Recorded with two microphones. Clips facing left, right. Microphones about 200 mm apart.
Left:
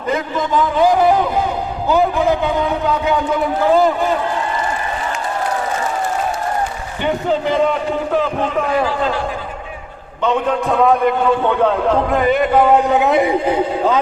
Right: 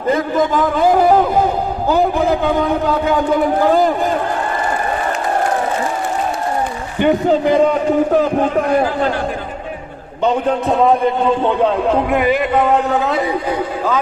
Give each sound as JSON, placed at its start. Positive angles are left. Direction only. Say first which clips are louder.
{"t": 7.0, "sound": "a man's voice", "louder": "right 5 dB", "side_deg": -45}
{"t": 10.2, "sound": "a man's voice", "louder": "right 1 dB", "side_deg": -35}
{"t": 12.6, "sound": "speech", "louder": "left 2 dB", "side_deg": 15}